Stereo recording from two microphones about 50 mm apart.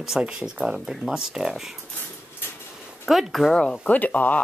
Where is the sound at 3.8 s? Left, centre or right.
Left.